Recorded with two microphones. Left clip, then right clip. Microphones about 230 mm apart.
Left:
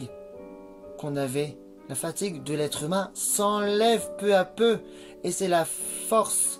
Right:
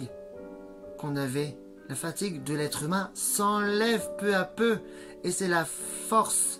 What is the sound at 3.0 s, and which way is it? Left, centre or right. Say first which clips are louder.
Speech: left 4 dB; left.